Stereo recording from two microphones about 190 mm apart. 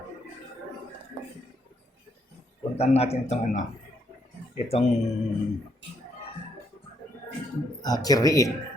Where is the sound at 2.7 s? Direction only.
35° left (ahead or behind).